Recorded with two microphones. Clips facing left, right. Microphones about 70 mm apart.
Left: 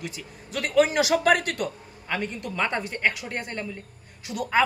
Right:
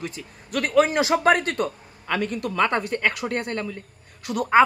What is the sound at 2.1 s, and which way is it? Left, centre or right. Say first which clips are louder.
Speech: right 5 dB; right.